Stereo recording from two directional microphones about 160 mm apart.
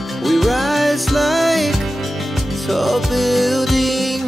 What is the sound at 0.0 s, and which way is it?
Music, centre (ahead or behind).